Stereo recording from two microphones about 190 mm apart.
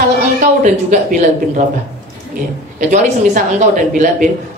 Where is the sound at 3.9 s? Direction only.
40° right (ahead or behind).